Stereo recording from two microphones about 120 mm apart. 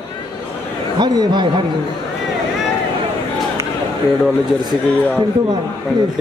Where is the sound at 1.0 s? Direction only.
35° right (ahead or behind).